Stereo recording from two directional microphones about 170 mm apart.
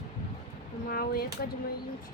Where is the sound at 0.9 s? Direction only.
65° left (ahead or behind).